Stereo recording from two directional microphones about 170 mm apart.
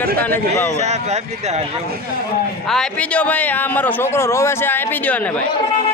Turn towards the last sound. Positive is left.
turn(degrees=10)  # may be behind; listen again after turning